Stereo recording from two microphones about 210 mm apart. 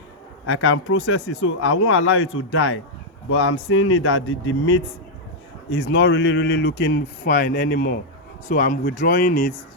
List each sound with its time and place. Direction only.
0.4 s speech: 70° left (ahead or behind)
5.7 s speech: 60° left (ahead or behind); by 9.5 s 40° left (ahead or behind)